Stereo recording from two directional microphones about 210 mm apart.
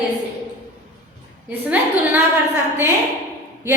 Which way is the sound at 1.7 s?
10° right (ahead or behind).